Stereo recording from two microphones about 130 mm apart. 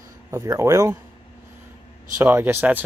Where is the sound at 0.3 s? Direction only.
20° right (ahead or behind).